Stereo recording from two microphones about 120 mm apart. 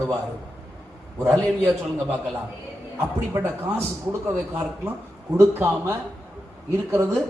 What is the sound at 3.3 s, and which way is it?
Speech, 20° right (ahead or behind).